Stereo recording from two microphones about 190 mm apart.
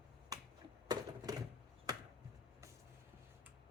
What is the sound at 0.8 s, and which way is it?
Typewriter, 20° right (ahead or behind).